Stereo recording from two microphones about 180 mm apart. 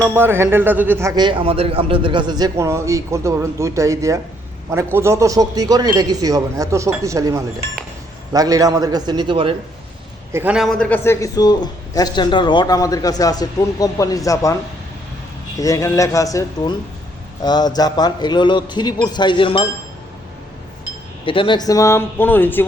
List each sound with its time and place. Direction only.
0.0 s a man's voice: 15° right (ahead or behind)
10.3 s a man's voice: 5° right (ahead or behind); by 14.5 s 20° left (ahead or behind)
15.6 s a man's voice: 15° left (ahead or behind)
21.2 s speech: 30° left (ahead or behind); by 22.6 s 10° left (ahead or behind)